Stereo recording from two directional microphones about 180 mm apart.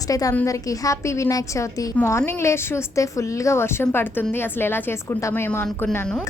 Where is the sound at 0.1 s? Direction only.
20° left (ahead or behind).